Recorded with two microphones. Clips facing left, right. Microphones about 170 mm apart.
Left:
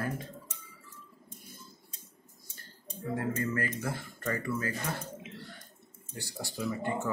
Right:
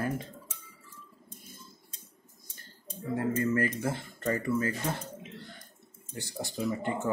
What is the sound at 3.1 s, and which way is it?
Speech, 20° right (ahead or behind).